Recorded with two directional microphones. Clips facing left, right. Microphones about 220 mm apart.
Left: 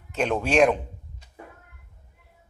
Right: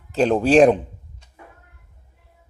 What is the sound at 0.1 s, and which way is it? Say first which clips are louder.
Speech: right 8 dB; 35° right (ahead or behind).